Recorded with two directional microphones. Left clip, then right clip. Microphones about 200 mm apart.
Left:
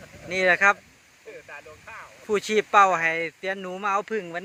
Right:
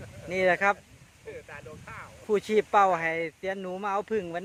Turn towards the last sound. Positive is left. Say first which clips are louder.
# left 3 dB
turn(degrees=-5)  # may be behind; listen again after turning